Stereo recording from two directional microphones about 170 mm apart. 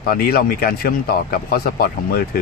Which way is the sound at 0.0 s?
60° left (ahead or behind).